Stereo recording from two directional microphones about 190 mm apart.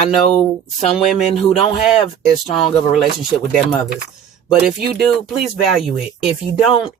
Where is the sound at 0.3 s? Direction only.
35° left (ahead or behind).